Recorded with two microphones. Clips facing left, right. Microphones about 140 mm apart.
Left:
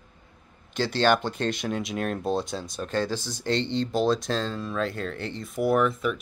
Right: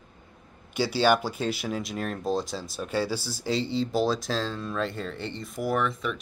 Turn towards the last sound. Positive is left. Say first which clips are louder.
# left 4 dB
turn(degrees=0)  # may be behind; listen again after turning